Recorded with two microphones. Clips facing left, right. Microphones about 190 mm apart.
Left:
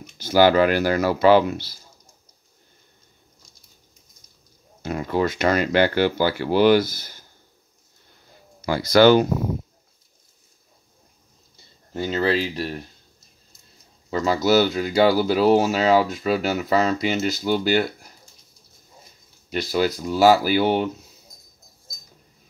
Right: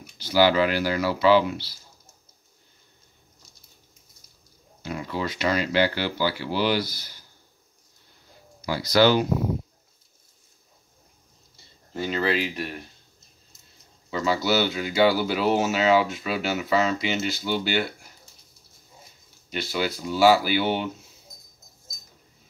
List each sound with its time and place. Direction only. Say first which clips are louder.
0.2 s speech: left 4 dB; 50° left (ahead or behind)
4.8 s speech: left 7 dB; 50° left (ahead or behind)
8.5 s speech: left 4 dB; 55° left (ahead or behind)
11.9 s speech: left 3 dB; 30° left (ahead or behind)
14.1 s speech: left 5 dB; 45° left (ahead or behind)
19.5 s speech: left 6 dB; 40° left (ahead or behind)